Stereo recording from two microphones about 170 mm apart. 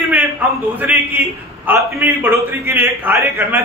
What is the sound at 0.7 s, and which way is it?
Speech, 10° right (ahead or behind).